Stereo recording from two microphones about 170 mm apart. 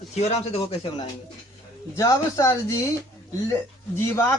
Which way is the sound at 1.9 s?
20° left (ahead or behind).